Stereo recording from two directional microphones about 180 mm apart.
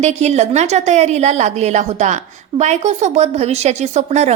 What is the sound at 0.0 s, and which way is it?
A woman's voice, 40° right (ahead or behind).